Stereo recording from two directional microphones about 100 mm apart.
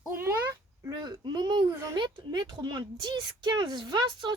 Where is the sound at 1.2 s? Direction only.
45° right (ahead or behind).